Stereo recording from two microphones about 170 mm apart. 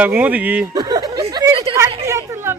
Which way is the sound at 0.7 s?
20° right (ahead or behind).